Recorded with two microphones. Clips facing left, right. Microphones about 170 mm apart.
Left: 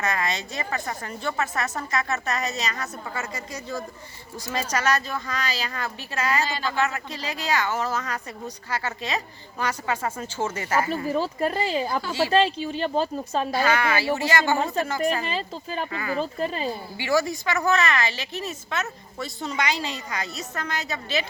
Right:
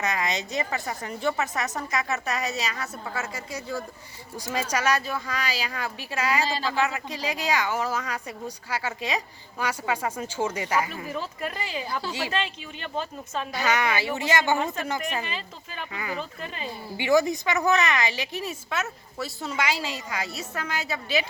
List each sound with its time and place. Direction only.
0.0 s speech: 20° right (ahead or behind)
6.4 s speech: 30° right (ahead or behind)
6.7 s speech: 15° right (ahead or behind)
10.8 s speech: 35° left (ahead or behind)
13.7 s speech: 20° right (ahead or behind)
15.0 s speech: 35° left (ahead or behind)
15.9 s speech: 15° right (ahead or behind)
16.1 s speech: 35° left (ahead or behind)
17.0 s speech: 20° right (ahead or behind)